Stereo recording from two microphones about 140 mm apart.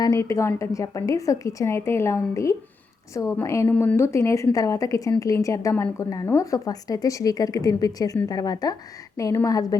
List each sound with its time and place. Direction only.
0.0 s a woman's voice: 25° left (ahead or behind)